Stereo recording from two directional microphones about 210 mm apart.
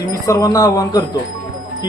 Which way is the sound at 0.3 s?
15° left (ahead or behind).